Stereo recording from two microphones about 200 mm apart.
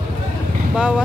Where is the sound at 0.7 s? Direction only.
5° right (ahead or behind).